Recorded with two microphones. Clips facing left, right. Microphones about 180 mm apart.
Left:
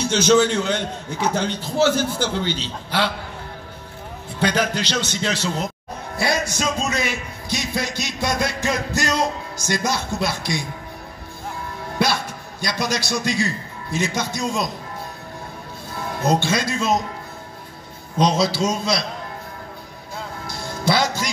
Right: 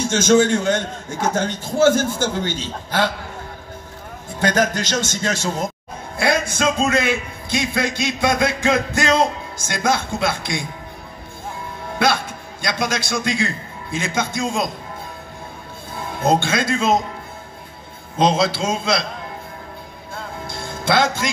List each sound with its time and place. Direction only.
0.0 s a man's voice: 50° right (ahead or behind)
4.3 s a man's voice: 45° right (ahead or behind)
12.0 s a man's voice: 55° right (ahead or behind)
16.2 s a man's voice: 50° right (ahead or behind)
18.3 s a man's voice: 55° right (ahead or behind)
20.4 s music: 55° right (ahead or behind)